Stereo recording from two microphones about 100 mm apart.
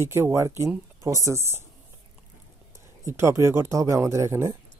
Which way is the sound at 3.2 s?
30° right (ahead or behind).